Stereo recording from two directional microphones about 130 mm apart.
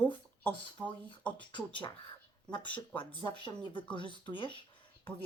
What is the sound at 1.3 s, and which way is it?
Speech, 40° left (ahead or behind).